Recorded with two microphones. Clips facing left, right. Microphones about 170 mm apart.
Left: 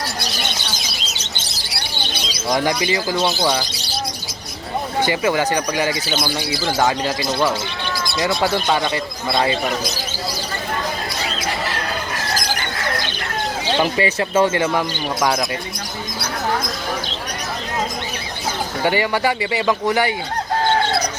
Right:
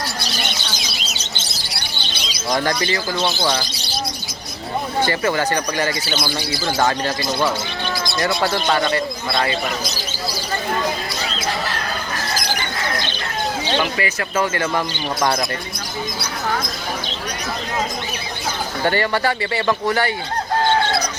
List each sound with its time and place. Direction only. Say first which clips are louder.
2.6 s a man's voice: left 1 dB; 15° left (ahead or behind)
4.9 s a man's voice: left 1 dB; 15° left (ahead or behind)
13.7 s speech: left 6 dB; 30° left (ahead or behind); by 14.8 s 15° left (ahead or behind)
18.8 s a man's voice: even; 10° left (ahead or behind)